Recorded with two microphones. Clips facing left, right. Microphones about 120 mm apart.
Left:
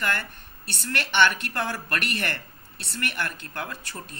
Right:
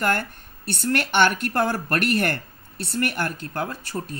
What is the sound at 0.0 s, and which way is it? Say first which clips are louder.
A woman's voice: right 5 dB; 45° right (ahead or behind).